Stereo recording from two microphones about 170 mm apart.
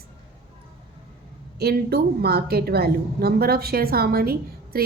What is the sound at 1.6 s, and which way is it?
A woman's voice, 65° right (ahead or behind).